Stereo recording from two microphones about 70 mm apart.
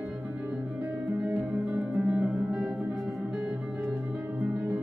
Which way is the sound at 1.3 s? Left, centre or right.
Right.